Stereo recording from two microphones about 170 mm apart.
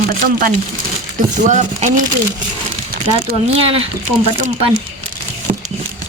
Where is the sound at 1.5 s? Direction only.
45° right (ahead or behind).